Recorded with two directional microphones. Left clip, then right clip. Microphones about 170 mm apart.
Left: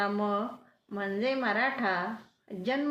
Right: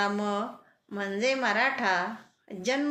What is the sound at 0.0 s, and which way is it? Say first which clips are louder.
A woman's voice: right 1 dB; 15° right (ahead or behind).